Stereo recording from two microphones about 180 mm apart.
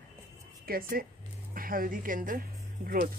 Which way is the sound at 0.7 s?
55° right (ahead or behind).